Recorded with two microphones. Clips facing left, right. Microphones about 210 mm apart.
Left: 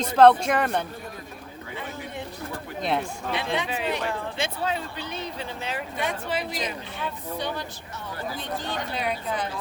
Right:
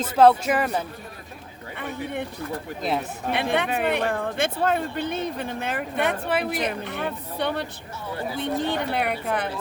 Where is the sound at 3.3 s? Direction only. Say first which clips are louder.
Right 5 dB; 60° right (ahead or behind).